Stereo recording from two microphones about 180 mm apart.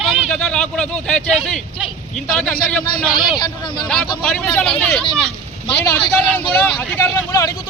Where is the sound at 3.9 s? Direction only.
5° left (ahead or behind).